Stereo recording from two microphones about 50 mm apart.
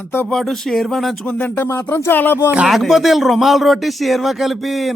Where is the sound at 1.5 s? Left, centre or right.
Left.